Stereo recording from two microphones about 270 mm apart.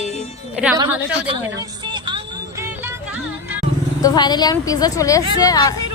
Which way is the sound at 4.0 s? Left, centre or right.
Centre.